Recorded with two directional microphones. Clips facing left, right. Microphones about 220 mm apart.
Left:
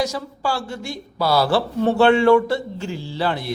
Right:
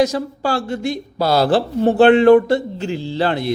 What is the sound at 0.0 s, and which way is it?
A woman's voice, 20° right (ahead or behind).